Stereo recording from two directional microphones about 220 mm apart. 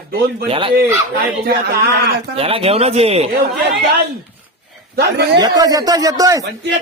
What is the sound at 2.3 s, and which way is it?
Speech, 25° right (ahead or behind).